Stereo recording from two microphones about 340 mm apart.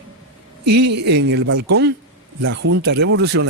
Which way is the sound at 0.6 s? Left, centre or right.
Right.